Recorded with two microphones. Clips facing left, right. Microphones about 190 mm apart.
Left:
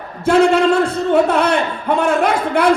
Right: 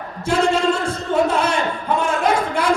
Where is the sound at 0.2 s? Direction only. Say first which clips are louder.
Left 6 dB; 60° left (ahead or behind).